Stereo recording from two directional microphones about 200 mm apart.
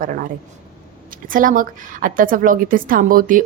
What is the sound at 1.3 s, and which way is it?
Speech, 45° right (ahead or behind).